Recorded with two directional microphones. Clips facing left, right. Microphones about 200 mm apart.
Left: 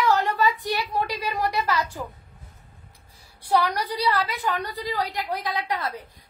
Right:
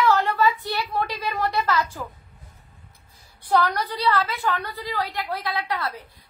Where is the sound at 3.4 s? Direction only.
10° left (ahead or behind).